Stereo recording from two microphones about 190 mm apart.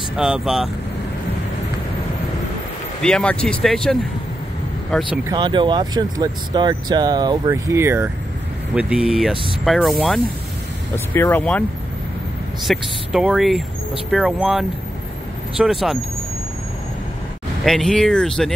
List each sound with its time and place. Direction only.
0.2 s speech: centre (ahead or behind)
3.0 s speech: 5° left (ahead or behind)
5.3 s speech: 25° right (ahead or behind); by 10.2 s centre (ahead or behind)
11.1 s speech: 10° left (ahead or behind)
12.6 s speech: centre (ahead or behind)
17.6 s speech: centre (ahead or behind)